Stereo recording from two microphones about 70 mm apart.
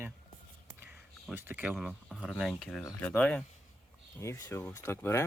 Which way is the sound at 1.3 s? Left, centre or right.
Right.